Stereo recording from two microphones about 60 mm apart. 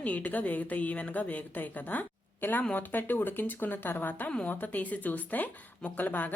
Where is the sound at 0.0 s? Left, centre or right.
Left.